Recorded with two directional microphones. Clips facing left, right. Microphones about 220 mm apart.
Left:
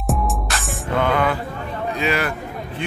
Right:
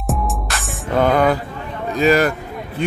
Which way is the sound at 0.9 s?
40° right (ahead or behind).